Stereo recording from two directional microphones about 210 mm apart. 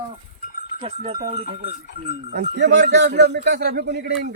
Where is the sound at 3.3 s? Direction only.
50° right (ahead or behind).